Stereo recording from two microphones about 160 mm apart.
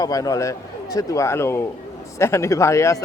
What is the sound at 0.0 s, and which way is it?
A man's voice, 20° left (ahead or behind).